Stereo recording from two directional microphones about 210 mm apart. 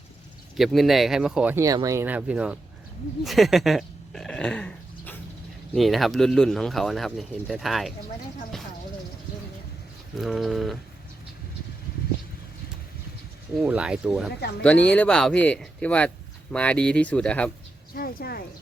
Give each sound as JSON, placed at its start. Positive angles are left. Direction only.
{"t": 0.5, "sound": "speech", "side_deg": 0}
{"t": 10.2, "sound": "speech", "side_deg": 0}
{"t": 13.6, "sound": "speech", "side_deg": -5}
{"t": 17.9, "sound": "a woman's voice", "side_deg": 45}